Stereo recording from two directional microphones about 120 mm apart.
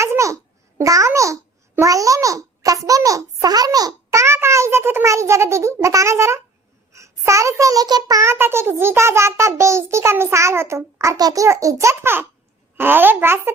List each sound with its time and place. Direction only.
0.0 s babbling: 25° right (ahead or behind)
0.8 s a child's voice: 25° right (ahead or behind)